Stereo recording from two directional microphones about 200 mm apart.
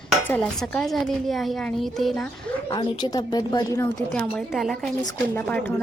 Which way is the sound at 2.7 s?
20° left (ahead or behind).